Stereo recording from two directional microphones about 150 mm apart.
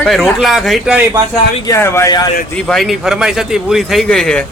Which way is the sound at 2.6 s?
5° left (ahead or behind).